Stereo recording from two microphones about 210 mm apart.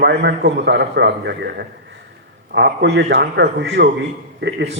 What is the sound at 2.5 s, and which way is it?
A man's voice, 55° right (ahead or behind).